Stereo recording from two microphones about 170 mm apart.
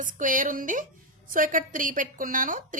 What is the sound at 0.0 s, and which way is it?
A woman's voice, 50° right (ahead or behind).